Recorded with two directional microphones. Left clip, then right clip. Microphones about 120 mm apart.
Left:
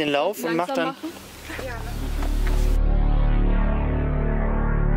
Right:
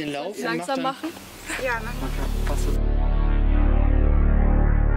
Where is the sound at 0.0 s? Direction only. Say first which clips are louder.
Left 7 dB; 25° left (ahead or behind).